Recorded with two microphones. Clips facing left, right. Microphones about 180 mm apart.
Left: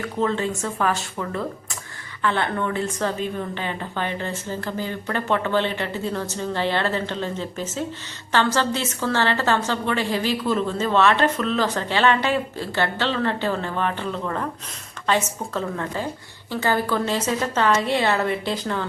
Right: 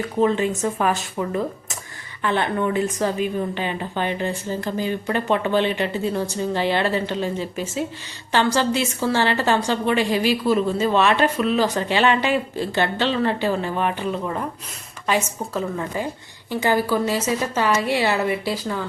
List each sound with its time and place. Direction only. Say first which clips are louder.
0.0 s a woman's voice: right 4 dB; 15° right (ahead or behind)